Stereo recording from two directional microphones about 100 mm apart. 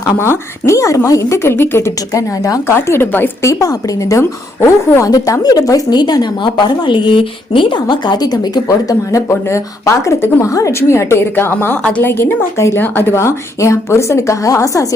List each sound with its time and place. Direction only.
0.2 s a woman's voice: 25° left (ahead or behind)
3.5 s a woman's voice: 35° left (ahead or behind)